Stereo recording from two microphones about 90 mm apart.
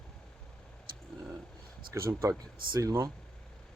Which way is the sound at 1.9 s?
30° right (ahead or behind).